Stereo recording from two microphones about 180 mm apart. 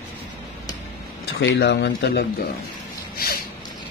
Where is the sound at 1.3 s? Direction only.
65° left (ahead or behind).